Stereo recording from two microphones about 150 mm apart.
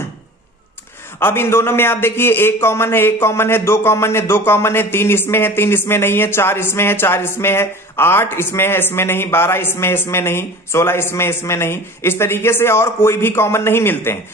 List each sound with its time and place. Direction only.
1.2 s a man's voice: 15° left (ahead or behind)